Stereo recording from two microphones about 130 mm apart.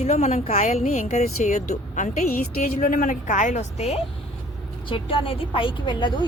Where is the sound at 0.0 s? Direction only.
60° left (ahead or behind).